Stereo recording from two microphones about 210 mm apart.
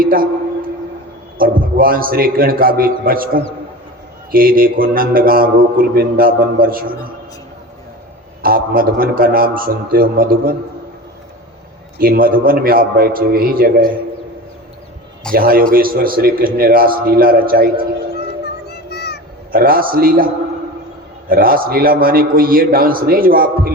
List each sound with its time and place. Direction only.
0.0 s a man's voice: 45° right (ahead or behind)
1.4 s mantra: 45° right (ahead or behind)
8.4 s mantra: 45° right (ahead or behind)
11.9 s mantra: 45° right (ahead or behind)
15.3 s mantra: 45° right (ahead or behind)
18.7 s music: 50° left (ahead or behind)
19.5 s mantra: 45° right (ahead or behind)